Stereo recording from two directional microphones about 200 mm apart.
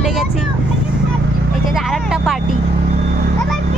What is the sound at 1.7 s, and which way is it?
Speech, centre (ahead or behind).